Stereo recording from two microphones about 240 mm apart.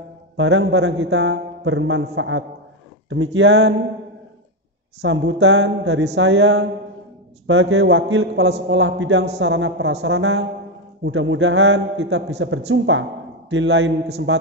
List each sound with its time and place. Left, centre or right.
0.4 s a man's voice: right
5.0 s a man's voice: right